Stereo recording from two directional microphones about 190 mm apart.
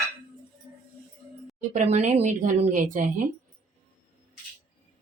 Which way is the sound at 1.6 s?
40° right (ahead or behind).